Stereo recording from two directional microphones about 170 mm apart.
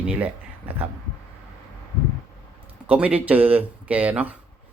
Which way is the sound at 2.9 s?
10° right (ahead or behind).